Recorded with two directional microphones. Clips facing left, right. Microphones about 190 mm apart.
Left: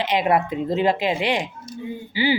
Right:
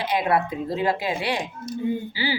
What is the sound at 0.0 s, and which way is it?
Speech, 20° left (ahead or behind).